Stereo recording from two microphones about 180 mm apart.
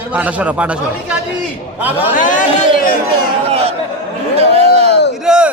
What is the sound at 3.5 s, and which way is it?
Speech, 35° right (ahead or behind).